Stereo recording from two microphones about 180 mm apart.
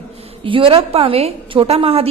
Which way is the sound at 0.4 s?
30° right (ahead or behind).